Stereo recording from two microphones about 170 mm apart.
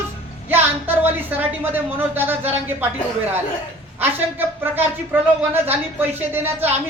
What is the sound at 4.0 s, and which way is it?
A woman's voice, 10° right (ahead or behind).